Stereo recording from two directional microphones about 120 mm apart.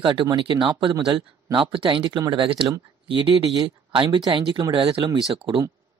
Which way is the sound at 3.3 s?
30° right (ahead or behind).